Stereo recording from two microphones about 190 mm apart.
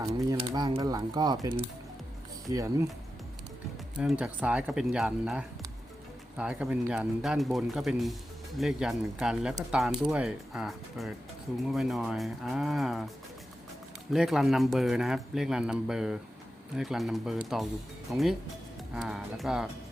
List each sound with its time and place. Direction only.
0.0 s speech: 20° right (ahead or behind)
3.9 s a man's voice: 5° right (ahead or behind)
14.1 s a man's voice: centre (ahead or behind)